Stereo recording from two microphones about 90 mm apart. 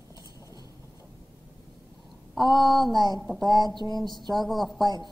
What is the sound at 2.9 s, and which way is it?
Speech, 50° right (ahead or behind).